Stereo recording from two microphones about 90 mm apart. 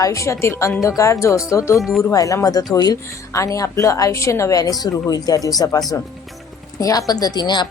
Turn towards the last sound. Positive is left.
turn(degrees=55)  # may be behind; listen again after turning